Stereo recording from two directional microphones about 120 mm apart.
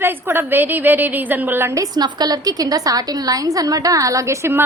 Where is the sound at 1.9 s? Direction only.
35° right (ahead or behind).